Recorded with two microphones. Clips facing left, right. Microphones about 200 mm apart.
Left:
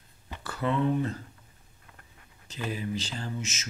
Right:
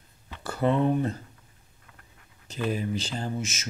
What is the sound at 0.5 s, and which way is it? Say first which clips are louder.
Speech: right 4 dB; 40° right (ahead or behind).